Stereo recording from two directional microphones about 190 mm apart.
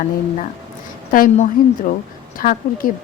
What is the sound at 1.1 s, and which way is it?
A woman's voice, 45° left (ahead or behind).